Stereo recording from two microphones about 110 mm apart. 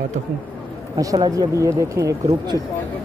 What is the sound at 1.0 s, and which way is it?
Speech, 30° right (ahead or behind).